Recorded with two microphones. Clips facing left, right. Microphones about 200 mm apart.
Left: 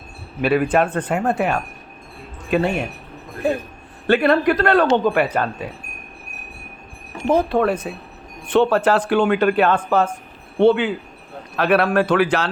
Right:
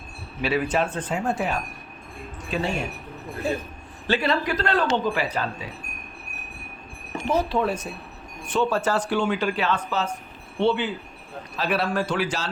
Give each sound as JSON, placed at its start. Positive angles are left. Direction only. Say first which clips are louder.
{"t": 0.4, "sound": "speech", "louder": "left 6 dB", "side_deg": 55}
{"t": 4.0, "sound": "speech", "louder": "left 8 dB", "side_deg": 55}
{"t": 7.3, "sound": "speech", "louder": "left 6 dB", "side_deg": 55}